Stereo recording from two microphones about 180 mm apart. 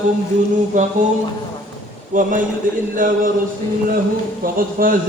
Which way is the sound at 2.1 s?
50° right (ahead or behind).